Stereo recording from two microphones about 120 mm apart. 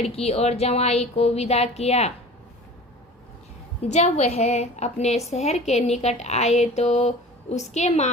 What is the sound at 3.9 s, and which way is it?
A woman's voice, 65° left (ahead or behind).